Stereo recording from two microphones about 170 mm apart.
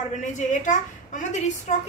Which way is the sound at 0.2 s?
45° left (ahead or behind).